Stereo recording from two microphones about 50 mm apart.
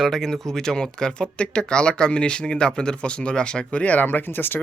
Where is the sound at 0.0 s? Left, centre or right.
Centre; by 4.0 s left.